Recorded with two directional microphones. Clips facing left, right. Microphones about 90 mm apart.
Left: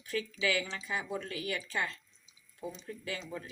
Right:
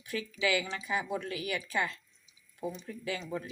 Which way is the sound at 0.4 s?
20° right (ahead or behind).